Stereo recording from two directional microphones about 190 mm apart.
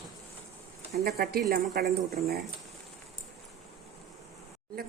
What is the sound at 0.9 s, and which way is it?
Speech, 55° right (ahead or behind).